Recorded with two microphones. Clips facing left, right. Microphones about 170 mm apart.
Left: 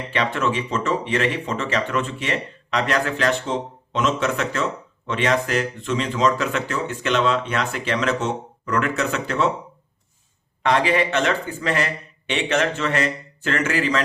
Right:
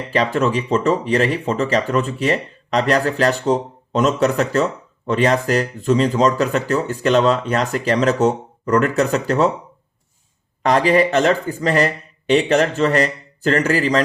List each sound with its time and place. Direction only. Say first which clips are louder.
0.1 s speech: right 5 dB; 35° right (ahead or behind)
10.6 s speech: right 5 dB; 40° right (ahead or behind)